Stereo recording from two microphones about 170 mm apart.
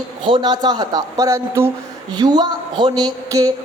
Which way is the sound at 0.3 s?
25° right (ahead or behind).